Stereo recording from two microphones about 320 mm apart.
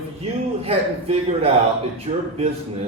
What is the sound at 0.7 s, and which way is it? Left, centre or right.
Speech, centre.